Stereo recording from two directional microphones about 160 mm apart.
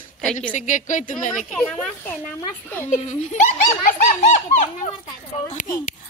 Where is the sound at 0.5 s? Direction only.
50° left (ahead or behind).